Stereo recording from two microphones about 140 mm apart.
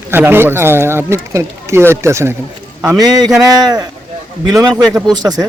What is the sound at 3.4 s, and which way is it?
Speech, 25° right (ahead or behind).